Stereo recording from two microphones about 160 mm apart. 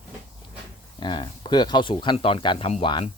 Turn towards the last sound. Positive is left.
turn(degrees=35)  # may be behind; listen again after turning